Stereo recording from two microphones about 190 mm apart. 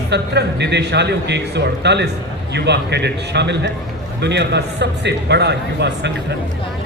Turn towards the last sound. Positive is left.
turn(degrees=-65)  # may be behind; listen again after turning